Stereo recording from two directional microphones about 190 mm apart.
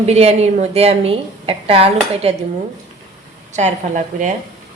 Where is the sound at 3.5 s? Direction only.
40° right (ahead or behind).